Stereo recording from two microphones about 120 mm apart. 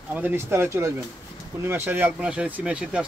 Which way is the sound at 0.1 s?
15° right (ahead or behind).